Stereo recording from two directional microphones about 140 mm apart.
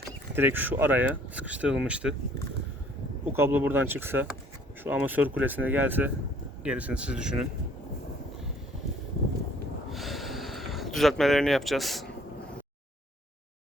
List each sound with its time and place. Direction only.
0.3 s speech: 15° right (ahead or behind)
3.3 s speech: 15° right (ahead or behind)
9.9 s gasp: centre (ahead or behind)